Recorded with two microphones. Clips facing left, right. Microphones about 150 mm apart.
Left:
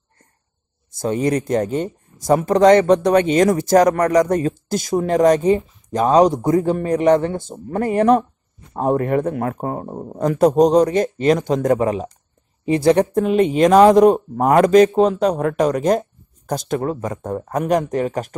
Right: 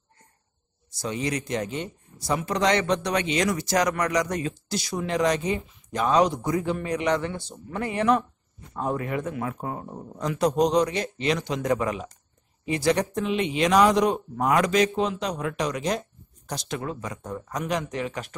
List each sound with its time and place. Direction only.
0.9 s speech: 50° left (ahead or behind)
11.8 s speech: 30° left (ahead or behind)
12.9 s speech: 50° left (ahead or behind)